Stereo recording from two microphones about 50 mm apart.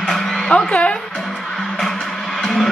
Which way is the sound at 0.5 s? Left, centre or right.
Left.